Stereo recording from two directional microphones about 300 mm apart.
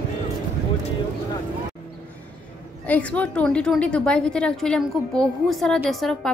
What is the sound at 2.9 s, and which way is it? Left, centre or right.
A woman's voice, centre.